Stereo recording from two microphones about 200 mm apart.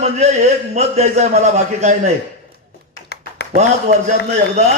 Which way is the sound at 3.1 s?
55° left (ahead or behind).